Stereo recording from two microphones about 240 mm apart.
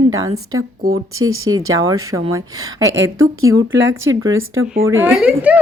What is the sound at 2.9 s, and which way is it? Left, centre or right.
Speech, right.